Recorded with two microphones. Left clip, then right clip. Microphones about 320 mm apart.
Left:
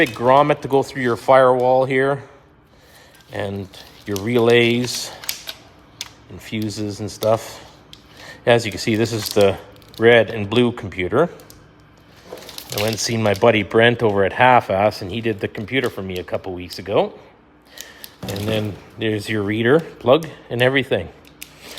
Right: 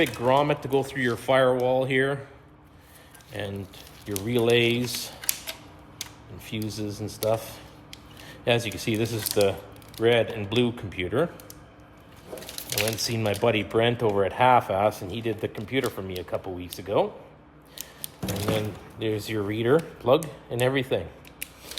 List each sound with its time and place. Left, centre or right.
0.0 s speech: left
4.3 s speech: left
12.8 s speech: left
18.5 s speech: left